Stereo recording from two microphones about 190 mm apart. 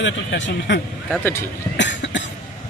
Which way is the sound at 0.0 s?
75° left (ahead or behind).